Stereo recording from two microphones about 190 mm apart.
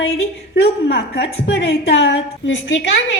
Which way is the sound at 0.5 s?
55° left (ahead or behind).